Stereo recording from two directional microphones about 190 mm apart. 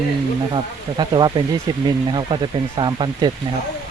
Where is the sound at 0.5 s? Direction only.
25° right (ahead or behind).